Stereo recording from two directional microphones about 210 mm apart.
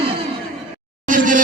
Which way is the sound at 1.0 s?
40° right (ahead or behind).